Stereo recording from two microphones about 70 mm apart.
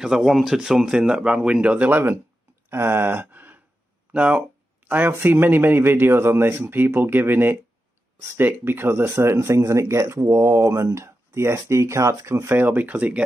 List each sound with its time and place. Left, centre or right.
0.0 s speech: centre; by 2.1 s right
2.7 s a sound: right
5.1 s speech: right